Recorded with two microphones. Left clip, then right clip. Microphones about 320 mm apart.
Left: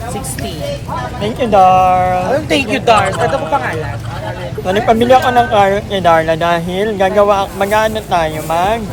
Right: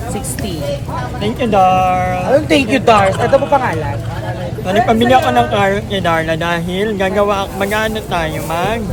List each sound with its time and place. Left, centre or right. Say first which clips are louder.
1.2 s speech: left 3 dB; centre
2.3 s speech: right 2 dB; centre
4.6 s speech: left 1 dB; centre